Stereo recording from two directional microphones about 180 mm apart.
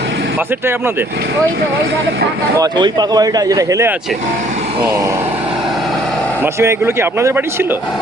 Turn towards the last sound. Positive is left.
turn(degrees=-15)  # may be behind; listen again after turning